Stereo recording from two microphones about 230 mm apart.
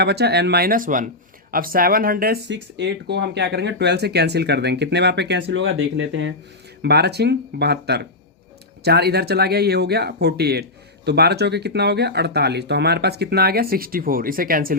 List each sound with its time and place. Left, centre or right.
0.0 s speech: right